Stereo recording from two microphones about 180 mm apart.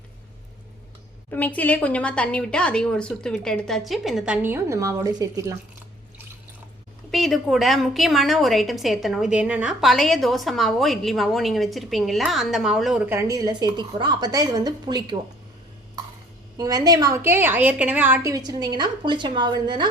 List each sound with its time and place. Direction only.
1.3 s a woman's voice: 10° left (ahead or behind)
4.4 s speech: 15° right (ahead or behind)
7.1 s a woman's voice: centre (ahead or behind); by 15.2 s 25° right (ahead or behind)
16.6 s a woman's voice: 20° right (ahead or behind)